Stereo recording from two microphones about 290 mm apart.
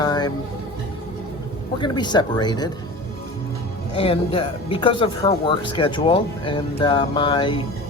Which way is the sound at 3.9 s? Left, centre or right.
Centre.